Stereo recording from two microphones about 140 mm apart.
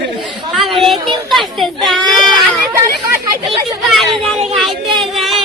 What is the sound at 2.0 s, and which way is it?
Baby cry, 30° right (ahead or behind).